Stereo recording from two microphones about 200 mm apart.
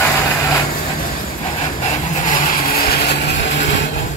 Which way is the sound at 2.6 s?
50° left (ahead or behind).